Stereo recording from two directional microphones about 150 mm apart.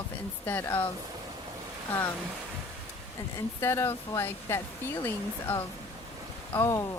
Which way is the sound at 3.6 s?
15° left (ahead or behind).